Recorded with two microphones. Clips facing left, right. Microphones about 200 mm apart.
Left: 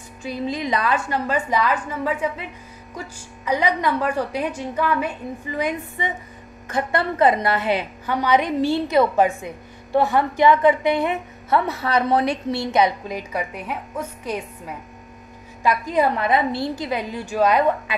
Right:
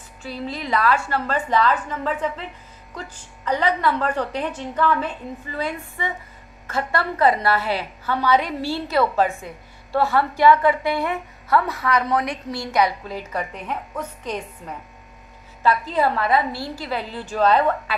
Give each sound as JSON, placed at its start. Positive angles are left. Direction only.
{"t": 0.2, "sound": "a woman's voice", "side_deg": 15}